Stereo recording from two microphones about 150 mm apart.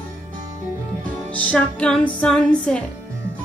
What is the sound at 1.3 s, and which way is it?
Music, 10° left (ahead or behind).